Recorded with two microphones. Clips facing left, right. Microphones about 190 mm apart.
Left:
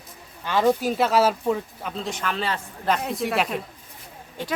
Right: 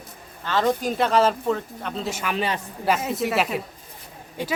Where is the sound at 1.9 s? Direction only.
5° right (ahead or behind).